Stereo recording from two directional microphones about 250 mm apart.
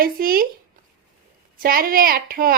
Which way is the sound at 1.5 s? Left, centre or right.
Right.